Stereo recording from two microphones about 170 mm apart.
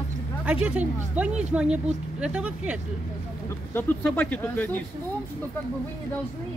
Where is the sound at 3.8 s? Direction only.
10° left (ahead or behind).